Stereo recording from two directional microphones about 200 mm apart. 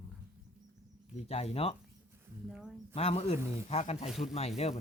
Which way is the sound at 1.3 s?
30° left (ahead or behind).